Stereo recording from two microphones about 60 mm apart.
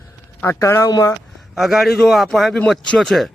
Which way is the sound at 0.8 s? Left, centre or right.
Left.